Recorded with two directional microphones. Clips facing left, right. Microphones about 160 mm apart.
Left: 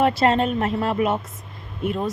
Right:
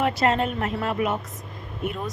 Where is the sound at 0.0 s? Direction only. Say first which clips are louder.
Left 4 dB; 30° left (ahead or behind).